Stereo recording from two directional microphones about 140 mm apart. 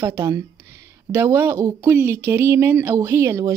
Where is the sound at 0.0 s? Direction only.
20° right (ahead or behind).